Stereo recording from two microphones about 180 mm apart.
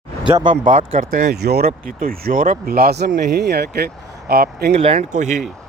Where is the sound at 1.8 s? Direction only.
55° right (ahead or behind).